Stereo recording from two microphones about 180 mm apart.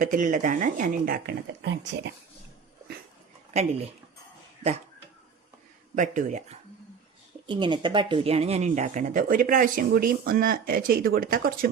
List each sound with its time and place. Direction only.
0.0 s speech: 45° right (ahead or behind); by 2.1 s 70° right (ahead or behind)
6.0 s speech: 45° right (ahead or behind)
7.4 s speech: 25° right (ahead or behind); by 11.7 s 50° right (ahead or behind)